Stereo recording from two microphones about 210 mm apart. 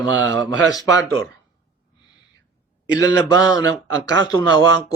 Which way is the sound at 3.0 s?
15° left (ahead or behind).